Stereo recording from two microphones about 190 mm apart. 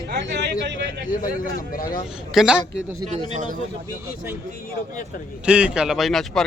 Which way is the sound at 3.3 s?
40° right (ahead or behind).